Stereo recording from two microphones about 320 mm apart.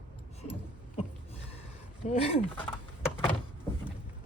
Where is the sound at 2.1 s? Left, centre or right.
Centre.